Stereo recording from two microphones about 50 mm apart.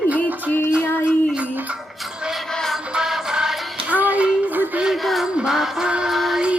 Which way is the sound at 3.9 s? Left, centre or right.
Right.